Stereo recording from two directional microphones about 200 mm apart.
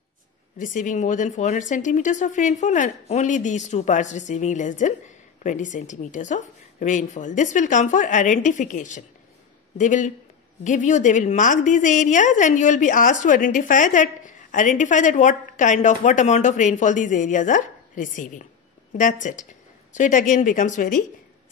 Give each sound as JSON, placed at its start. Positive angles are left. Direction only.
{"t": 0.6, "sound": "a woman's voice", "side_deg": 40}